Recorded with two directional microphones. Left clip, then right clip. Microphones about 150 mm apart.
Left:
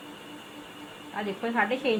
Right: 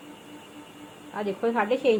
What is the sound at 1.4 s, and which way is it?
Speech, 70° right (ahead or behind).